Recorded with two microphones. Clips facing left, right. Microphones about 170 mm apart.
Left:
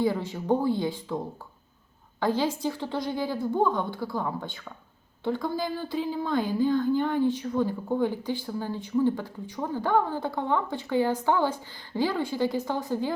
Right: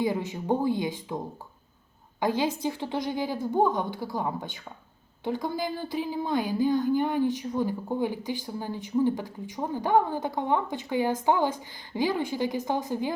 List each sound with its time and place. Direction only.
0.0 s a woman's voice: 15° right (ahead or behind)
2.2 s a woman's voice: 15° right (ahead or behind)